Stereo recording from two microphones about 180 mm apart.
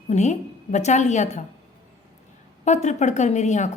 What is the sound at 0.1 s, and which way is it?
A woman's voice, 40° left (ahead or behind).